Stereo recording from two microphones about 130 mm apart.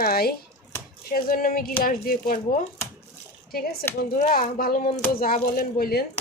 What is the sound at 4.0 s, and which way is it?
A woman's voice, 90° left.